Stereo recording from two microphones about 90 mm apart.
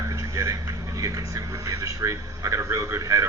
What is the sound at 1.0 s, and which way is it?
A man's voice, 35° right (ahead or behind).